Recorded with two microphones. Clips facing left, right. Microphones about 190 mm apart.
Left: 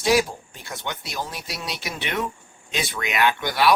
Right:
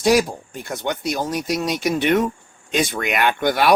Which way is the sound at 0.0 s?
45° right (ahead or behind).